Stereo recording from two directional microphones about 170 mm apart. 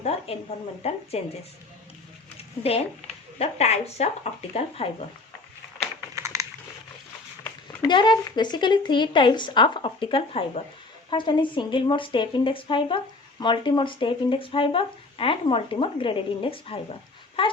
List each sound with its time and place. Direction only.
0.3 s speech: 35° left (ahead or behind)
3.3 s speech: 40° left (ahead or behind)
6.1 s a sound: 20° right (ahead or behind)
7.8 s speech: 25° left (ahead or behind)